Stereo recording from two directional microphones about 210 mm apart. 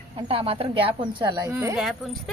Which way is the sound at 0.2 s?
25° right (ahead or behind).